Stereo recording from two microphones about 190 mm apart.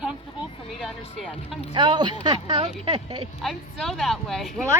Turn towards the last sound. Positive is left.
turn(degrees=0)  # may be behind; listen again after turning